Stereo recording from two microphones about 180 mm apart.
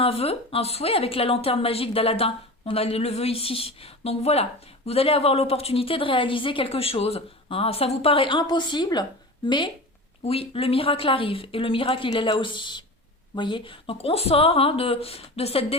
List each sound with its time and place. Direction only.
0.0 s a woman's voice: 35° left (ahead or behind)